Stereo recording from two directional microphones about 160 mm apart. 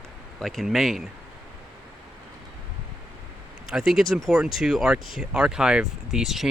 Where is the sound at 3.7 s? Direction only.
5° right (ahead or behind).